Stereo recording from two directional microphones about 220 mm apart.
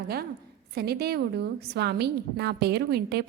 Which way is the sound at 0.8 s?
45° right (ahead or behind).